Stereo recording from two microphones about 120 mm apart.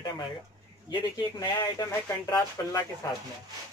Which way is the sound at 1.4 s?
35° left (ahead or behind).